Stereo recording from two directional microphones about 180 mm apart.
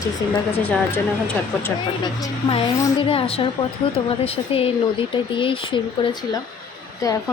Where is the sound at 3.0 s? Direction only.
30° left (ahead or behind).